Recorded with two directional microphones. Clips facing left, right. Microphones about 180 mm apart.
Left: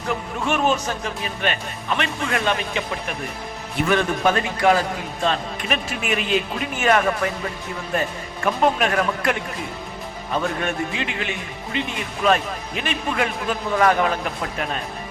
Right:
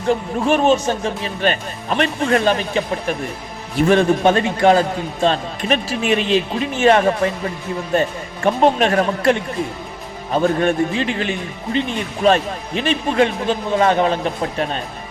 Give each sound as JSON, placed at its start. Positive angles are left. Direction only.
{"t": 0.1, "sound": "speech", "side_deg": -30}
{"t": 8.4, "sound": "speech", "side_deg": -30}